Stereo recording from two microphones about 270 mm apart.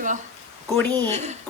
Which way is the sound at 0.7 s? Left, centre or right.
Centre.